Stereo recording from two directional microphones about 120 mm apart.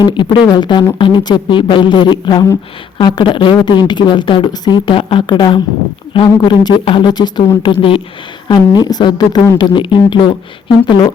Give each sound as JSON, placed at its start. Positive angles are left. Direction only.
{"t": 0.0, "sound": "speech", "side_deg": 40}
{"t": 8.4, "sound": "speech", "side_deg": 35}